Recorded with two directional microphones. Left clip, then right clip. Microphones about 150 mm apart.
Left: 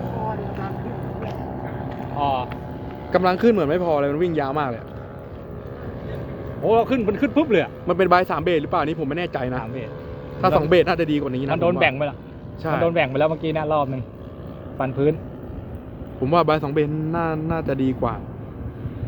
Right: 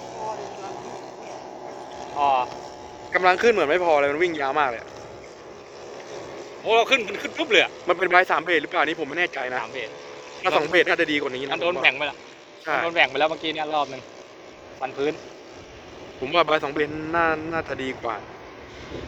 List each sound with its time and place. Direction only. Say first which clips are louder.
2.2 s speech: right 2 dB; 15° left (ahead or behind)
3.1 s speech: even; centre (ahead or behind)
6.7 s speech: left 1 dB; 40° left (ahead or behind)
7.9 s speech: left 1 dB; centre (ahead or behind)
11.5 s speech: left 2 dB; 65° left (ahead or behind)
12.8 s a man's voice: left 2 dB; 85° left
16.2 s speech: left 2 dB; centre (ahead or behind)